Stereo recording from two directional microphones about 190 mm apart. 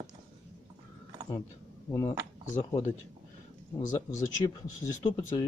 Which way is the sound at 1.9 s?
15° left (ahead or behind).